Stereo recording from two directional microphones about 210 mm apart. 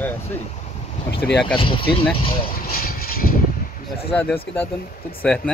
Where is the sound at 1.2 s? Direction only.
5° left (ahead or behind).